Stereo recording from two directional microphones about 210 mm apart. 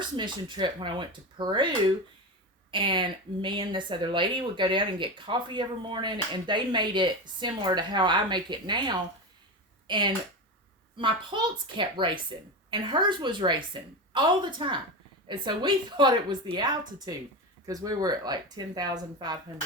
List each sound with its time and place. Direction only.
0.2 s speech: 20° right (ahead or behind)
2.7 s speech: 25° right (ahead or behind)